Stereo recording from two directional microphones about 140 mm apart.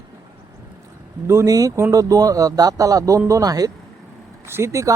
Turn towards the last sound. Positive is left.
turn(degrees=-20)  # may be behind; listen again after turning